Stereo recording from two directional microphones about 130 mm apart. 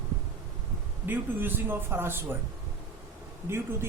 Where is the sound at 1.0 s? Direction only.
15° right (ahead or behind).